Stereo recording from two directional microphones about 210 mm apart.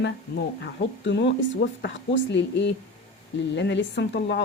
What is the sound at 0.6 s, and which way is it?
Speech, 55° left (ahead or behind).